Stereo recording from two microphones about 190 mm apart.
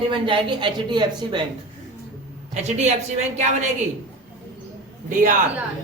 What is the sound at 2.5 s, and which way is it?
Speech, 35° right (ahead or behind).